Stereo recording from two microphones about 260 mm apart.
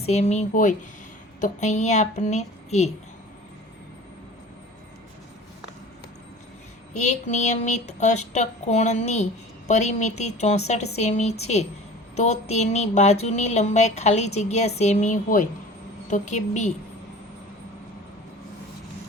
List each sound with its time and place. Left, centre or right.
0.0 s speech: left
6.9 s speech: left